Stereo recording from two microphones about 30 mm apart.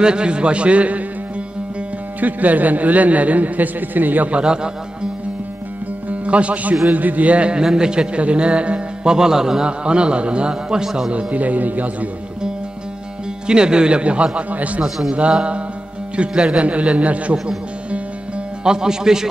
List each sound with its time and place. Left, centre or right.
0.0 s a man's voice: right
2.1 s a man's voice: right
6.2 s a man's voice: right
6.9 s a man's voice: right
7.3 s a man's voice: right
8.2 s a man's voice: right
9.0 s a man's voice: right
9.7 s a man's voice: right
11.1 s a man's voice: right
11.3 s speech: right
13.5 s a man's voice: right
14.5 s speech: right
16.2 s a man's voice: right
18.6 s a man's voice: right